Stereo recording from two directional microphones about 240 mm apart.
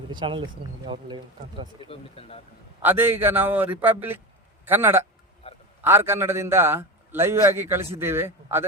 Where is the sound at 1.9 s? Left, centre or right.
Left.